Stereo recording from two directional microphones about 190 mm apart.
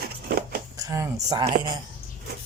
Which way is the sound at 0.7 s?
15° right (ahead or behind).